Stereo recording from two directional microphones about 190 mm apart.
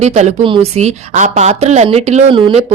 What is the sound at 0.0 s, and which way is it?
A woman's voice, 35° right (ahead or behind).